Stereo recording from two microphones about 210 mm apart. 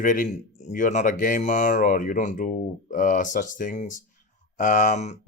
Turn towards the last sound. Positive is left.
turn(degrees=35)  # may be behind; listen again after turning